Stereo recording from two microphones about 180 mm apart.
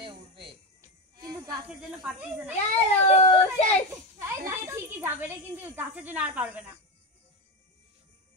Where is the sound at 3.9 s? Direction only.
15° right (ahead or behind).